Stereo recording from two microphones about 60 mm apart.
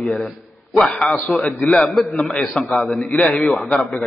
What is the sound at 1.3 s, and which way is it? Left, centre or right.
Speech, centre.